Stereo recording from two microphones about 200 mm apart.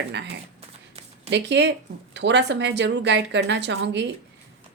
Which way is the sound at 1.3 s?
60° right (ahead or behind).